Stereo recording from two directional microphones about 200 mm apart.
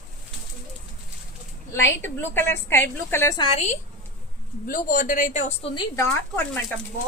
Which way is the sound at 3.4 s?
30° left (ahead or behind).